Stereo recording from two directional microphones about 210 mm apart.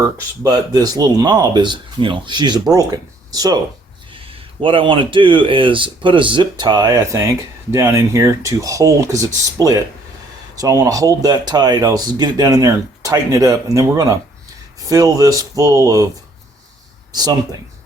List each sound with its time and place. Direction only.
0.4 s speech: 20° right (ahead or behind)
17.1 s speech: 20° right (ahead or behind)